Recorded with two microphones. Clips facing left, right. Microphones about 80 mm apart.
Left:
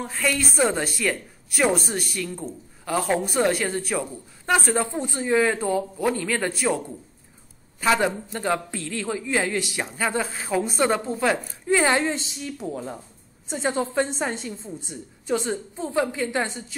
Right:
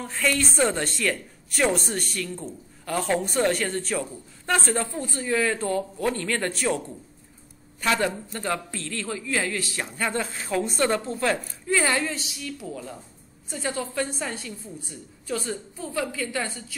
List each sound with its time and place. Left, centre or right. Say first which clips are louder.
0.1 s speech: right 2 dB; centre
7.8 s a man's voice: left 3 dB; centre